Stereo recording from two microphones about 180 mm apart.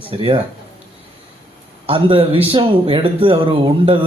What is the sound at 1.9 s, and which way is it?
Speech, 30° right (ahead or behind).